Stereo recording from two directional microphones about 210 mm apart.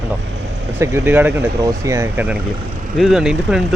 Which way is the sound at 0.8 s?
10° right (ahead or behind).